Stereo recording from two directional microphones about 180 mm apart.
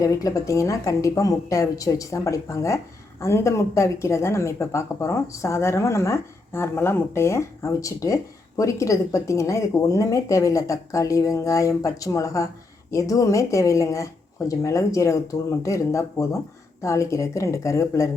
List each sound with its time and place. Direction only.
0.0 s speech: 20° left (ahead or behind)